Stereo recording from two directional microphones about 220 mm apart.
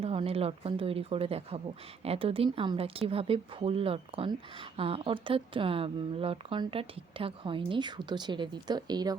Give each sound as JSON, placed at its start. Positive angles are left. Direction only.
{"t": 0.0, "sound": "a woman's voice", "side_deg": -25}